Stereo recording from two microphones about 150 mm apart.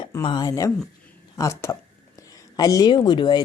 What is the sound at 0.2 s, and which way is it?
Speech, 30° left (ahead or behind).